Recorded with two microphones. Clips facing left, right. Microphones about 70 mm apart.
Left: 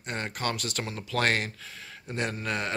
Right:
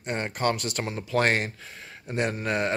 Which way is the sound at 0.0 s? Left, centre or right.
Right.